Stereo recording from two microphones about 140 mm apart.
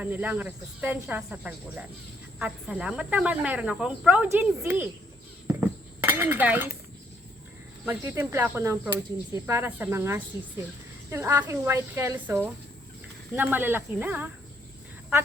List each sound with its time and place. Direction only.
0.0 s speech: 10° right (ahead or behind)
5.5 s chink: 15° right (ahead or behind)
7.9 s speech: 15° right (ahead or behind)